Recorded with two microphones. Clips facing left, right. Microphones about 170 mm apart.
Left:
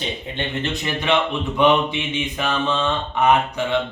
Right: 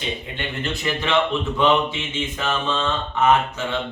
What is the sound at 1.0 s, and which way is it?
Mantra, 15° left (ahead or behind).